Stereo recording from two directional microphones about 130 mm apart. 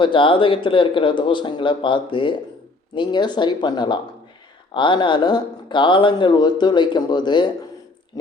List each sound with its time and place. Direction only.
0.0 s speech: 40° left (ahead or behind)